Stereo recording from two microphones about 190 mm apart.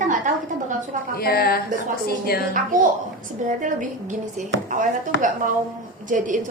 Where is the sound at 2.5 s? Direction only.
45° right (ahead or behind).